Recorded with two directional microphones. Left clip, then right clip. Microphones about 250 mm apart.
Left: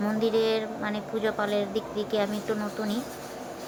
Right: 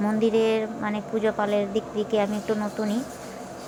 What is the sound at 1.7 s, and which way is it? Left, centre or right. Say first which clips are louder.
Speech: right 3 dB; right.